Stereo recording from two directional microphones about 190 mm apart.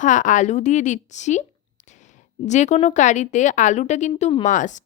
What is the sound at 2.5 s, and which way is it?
A woman's voice, 40° left (ahead or behind).